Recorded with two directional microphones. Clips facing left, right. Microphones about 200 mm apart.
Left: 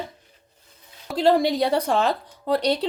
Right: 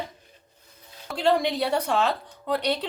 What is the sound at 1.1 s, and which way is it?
A woman's voice, 35° left (ahead or behind).